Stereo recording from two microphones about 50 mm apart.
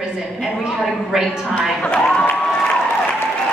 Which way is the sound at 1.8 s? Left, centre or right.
Left.